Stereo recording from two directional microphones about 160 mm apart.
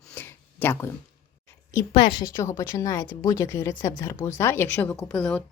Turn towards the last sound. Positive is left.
turn(degrees=5)  # may be behind; listen again after turning